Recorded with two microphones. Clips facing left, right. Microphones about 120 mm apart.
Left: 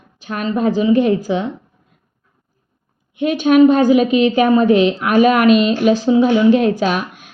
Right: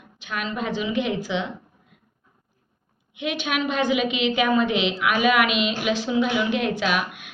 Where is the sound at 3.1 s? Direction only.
45° left (ahead or behind).